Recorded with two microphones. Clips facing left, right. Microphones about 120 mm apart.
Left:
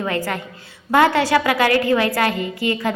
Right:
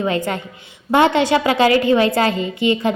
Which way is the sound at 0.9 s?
20° right (ahead or behind).